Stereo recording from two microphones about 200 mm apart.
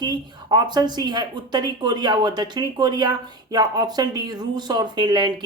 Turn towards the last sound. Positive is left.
turn(degrees=-20)  # may be behind; listen again after turning